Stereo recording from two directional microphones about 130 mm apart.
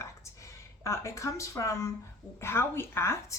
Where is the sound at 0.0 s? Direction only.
25° left (ahead or behind).